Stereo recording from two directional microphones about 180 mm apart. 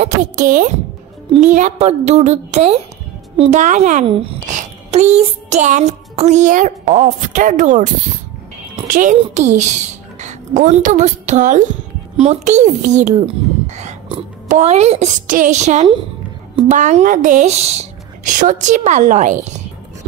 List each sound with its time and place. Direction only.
0.0 s a woman's voice: 45° right (ahead or behind)
4.4 s music: 45° right (ahead or behind)
8.8 s a child's voice: 45° right (ahead or behind)
13.7 s a sound: 40° right (ahead or behind)
14.5 s speech: 40° right (ahead or behind)